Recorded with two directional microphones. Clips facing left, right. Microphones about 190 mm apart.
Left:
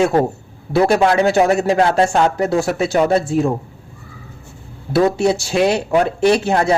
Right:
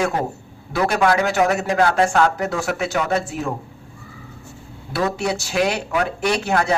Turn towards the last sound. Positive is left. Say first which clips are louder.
# left 6 dB
turn(degrees=25)  # may be behind; listen again after turning